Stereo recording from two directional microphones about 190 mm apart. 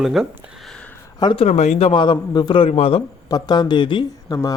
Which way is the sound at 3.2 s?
20° left (ahead or behind).